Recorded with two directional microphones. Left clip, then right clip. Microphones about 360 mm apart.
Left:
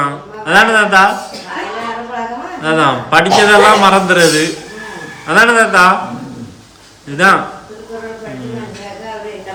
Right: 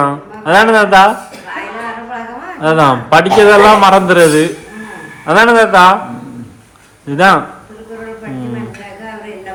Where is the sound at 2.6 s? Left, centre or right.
Centre.